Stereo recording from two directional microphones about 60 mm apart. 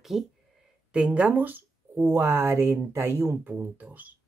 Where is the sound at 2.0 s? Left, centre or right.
Right.